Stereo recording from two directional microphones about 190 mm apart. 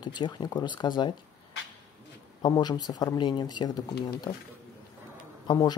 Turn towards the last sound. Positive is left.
turn(degrees=20)  # may be behind; listen again after turning